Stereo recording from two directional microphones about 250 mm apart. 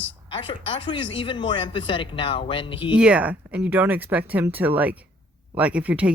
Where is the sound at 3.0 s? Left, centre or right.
Centre.